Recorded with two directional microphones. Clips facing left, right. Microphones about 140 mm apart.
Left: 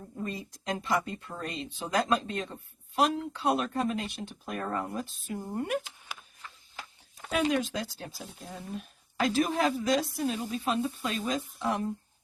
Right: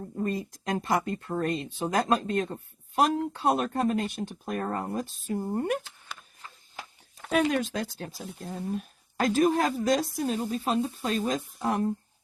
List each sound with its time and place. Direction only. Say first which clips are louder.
0.2 s a woman's voice: right 6 dB; 50° right (ahead or behind)
7.3 s a woman's voice: right 3 dB; 50° right (ahead or behind)